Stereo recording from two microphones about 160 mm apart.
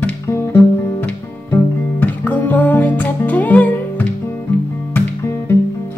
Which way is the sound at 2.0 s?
10° left (ahead or behind).